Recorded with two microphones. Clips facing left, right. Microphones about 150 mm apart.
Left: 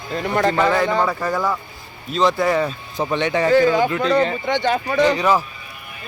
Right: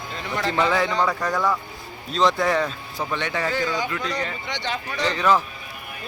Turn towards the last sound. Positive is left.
turn(degrees=10)  # may be behind; listen again after turning